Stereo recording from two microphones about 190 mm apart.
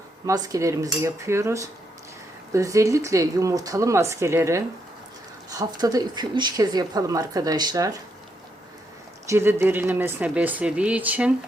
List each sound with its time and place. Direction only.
0.3 s speech: 20° right (ahead or behind)
9.2 s speech: 15° right (ahead or behind)